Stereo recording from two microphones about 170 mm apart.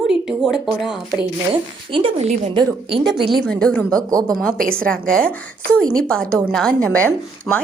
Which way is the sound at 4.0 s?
20° right (ahead or behind).